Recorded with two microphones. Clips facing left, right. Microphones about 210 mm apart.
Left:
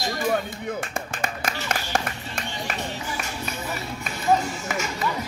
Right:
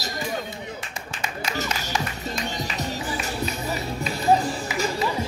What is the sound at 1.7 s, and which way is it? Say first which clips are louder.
Music: left 1 dB; 55° left (ahead or behind).